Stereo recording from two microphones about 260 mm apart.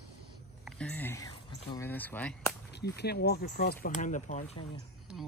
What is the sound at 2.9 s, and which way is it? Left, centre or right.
Speech, left.